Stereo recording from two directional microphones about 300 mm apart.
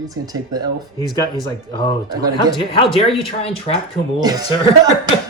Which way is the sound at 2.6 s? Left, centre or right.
Centre.